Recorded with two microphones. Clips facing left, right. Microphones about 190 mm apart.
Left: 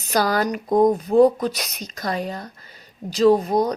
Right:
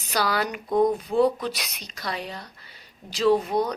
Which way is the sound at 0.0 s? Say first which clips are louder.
Left 5 dB; 45° left (ahead or behind).